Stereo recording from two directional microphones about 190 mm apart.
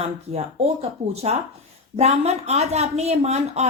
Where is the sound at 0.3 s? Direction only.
35° right (ahead or behind).